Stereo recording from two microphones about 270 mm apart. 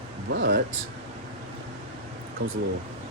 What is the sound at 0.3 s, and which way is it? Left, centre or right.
Speech, right.